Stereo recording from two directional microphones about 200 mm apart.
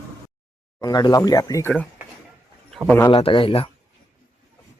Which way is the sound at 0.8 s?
20° left (ahead or behind).